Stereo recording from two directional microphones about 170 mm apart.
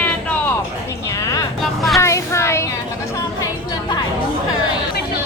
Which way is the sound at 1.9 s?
15° left (ahead or behind).